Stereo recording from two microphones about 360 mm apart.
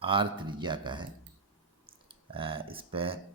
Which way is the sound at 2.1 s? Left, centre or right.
Centre.